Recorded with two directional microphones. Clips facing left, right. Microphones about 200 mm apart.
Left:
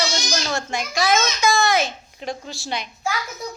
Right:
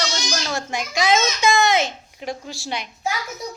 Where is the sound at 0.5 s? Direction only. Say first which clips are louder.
Even; 15° right (ahead or behind).